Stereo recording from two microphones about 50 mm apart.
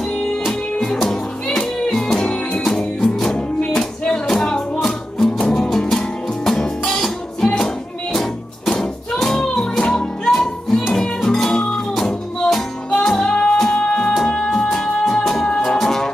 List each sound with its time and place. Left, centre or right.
0.5 s music: centre
12.9 s music: centre
14.5 s music: centre